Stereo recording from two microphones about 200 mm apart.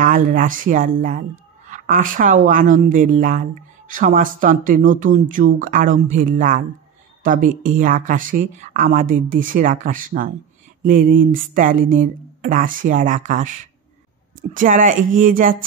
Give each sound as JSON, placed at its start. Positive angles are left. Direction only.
{"t": 0.0, "sound": "speech", "side_deg": -40}